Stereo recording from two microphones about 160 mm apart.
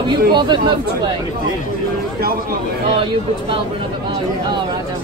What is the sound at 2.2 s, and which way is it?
Speech, 70° right (ahead or behind).